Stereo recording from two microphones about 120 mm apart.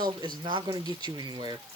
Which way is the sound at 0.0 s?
40° right (ahead or behind).